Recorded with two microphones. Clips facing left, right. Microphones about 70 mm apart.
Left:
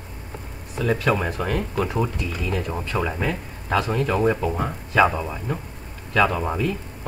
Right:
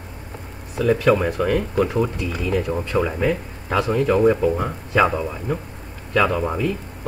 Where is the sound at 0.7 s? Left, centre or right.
Centre.